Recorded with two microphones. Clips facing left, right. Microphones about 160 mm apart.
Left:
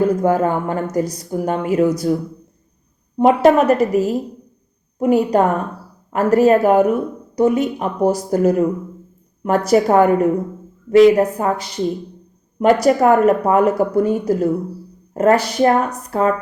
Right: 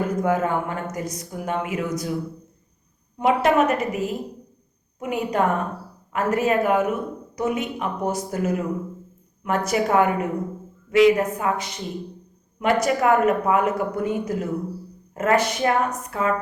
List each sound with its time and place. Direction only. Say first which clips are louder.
0.2 s speech: left 5 dB; 35° left (ahead or behind)
3.2 s speech: left 7 dB; 35° left (ahead or behind)